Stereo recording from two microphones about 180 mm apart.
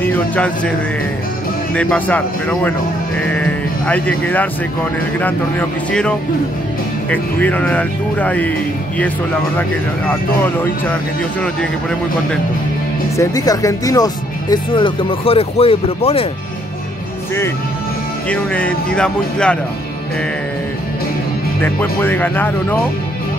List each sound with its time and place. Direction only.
0.0 s a man's voice: 10° left (ahead or behind)
1.8 s speech: 10° left (ahead or behind)
13.1 s speech: 20° left (ahead or behind)
18.3 s speech: 5° left (ahead or behind)
21.5 s speech: 10° left (ahead or behind)